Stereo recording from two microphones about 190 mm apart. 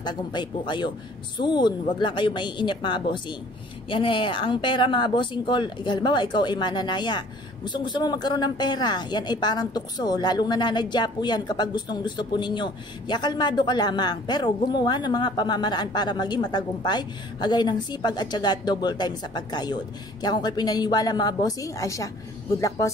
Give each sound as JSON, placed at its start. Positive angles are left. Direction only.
{"t": 0.0, "sound": "speech", "side_deg": 25}